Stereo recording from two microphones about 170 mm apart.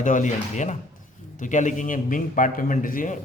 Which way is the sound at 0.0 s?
45° left (ahead or behind).